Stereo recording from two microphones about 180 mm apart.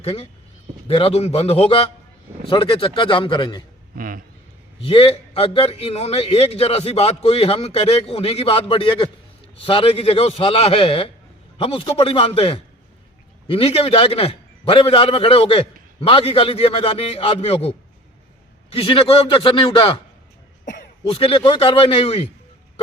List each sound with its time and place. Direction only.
0.0 s a man's voice: 35° left (ahead or behind)
3.9 s a man's voice: 50° right (ahead or behind)
4.8 s a man's voice: 30° left (ahead or behind)
20.7 s throat clearing: 45° left (ahead or behind)
21.0 s a man's voice: 30° left (ahead or behind)